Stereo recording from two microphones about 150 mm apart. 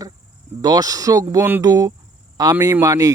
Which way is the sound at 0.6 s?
25° right (ahead or behind).